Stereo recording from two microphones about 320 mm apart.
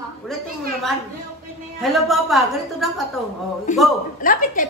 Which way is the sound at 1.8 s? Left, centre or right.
Centre.